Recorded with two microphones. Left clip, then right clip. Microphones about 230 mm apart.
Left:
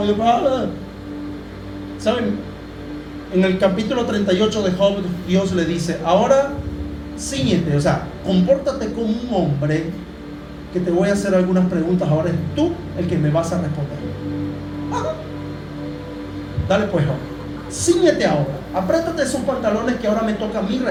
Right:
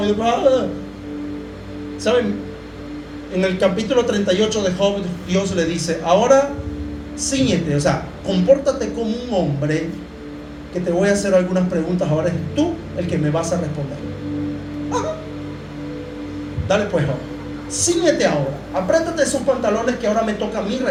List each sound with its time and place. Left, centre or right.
0.0 s a man's voice: right
2.1 s speech: right
3.3 s a man's voice: right
10.9 s a man's voice: right
16.6 s a man's voice: right